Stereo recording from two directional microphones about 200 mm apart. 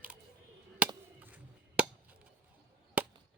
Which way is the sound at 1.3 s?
5° right (ahead or behind).